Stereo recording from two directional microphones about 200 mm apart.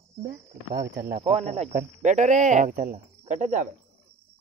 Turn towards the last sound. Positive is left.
turn(degrees=-40)  # may be behind; listen again after turning